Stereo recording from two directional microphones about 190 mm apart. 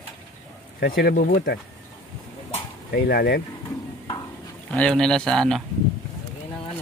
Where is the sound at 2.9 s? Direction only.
55° left (ahead or behind).